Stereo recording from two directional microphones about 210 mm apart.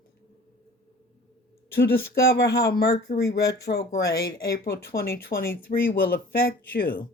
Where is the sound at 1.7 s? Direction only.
50° left (ahead or behind).